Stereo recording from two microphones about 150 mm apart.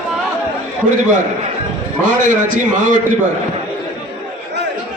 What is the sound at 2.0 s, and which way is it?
A man's voice, 55° right (ahead or behind).